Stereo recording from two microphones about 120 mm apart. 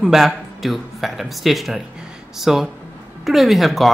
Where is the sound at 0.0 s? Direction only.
Centre (ahead or behind).